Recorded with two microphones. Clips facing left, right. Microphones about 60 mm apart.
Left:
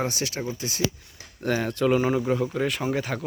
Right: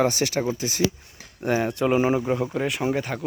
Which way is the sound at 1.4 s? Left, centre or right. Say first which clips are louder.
Right 1 dB; centre.